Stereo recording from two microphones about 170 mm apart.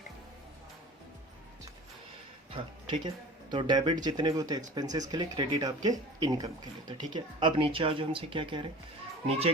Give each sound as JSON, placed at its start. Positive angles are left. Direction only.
{"t": 2.5, "sound": "a child's voice", "side_deg": -30}